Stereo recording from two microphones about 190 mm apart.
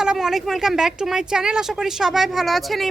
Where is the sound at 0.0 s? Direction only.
5° right (ahead or behind).